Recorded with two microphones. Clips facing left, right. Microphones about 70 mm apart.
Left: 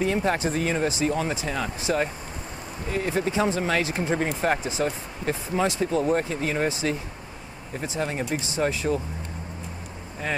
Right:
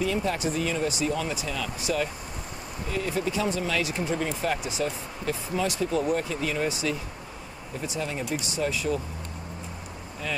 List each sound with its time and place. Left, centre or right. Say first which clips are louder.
0.0 s speech: left 3 dB; left